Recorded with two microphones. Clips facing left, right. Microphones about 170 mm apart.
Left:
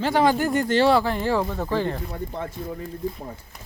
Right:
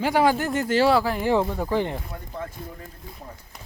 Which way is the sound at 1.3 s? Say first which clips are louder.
Right 1 dB; 15° right (ahead or behind).